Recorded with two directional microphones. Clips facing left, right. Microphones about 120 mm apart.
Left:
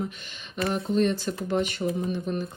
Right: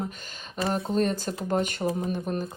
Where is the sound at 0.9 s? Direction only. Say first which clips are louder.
Left 2 dB; 40° right (ahead or behind).